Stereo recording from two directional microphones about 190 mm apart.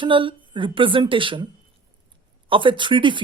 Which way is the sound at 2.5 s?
25° right (ahead or behind).